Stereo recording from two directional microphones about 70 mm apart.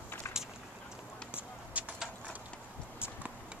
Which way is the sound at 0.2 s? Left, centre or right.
Left.